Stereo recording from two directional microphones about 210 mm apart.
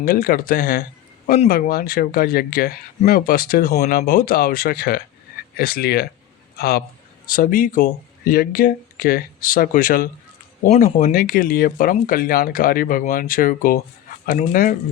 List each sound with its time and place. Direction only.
0.0 s speech: 45° left (ahead or behind)